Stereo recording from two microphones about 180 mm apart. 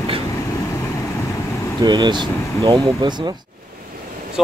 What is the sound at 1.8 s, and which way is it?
Speech, 25° right (ahead or behind).